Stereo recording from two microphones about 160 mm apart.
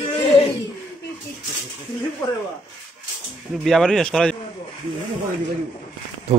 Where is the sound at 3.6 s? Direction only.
Centre (ahead or behind).